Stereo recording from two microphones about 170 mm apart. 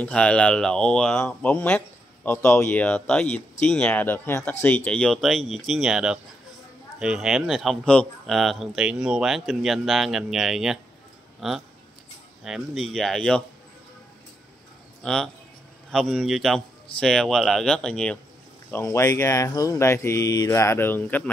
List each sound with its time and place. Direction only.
0.0 s a man's voice: 5° left (ahead or behind)
15.0 s a man's voice: 5° left (ahead or behind)
18.7 s speech: 15° left (ahead or behind)